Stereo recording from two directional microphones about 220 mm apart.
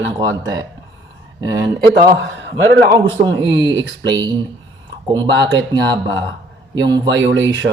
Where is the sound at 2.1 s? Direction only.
55° right (ahead or behind).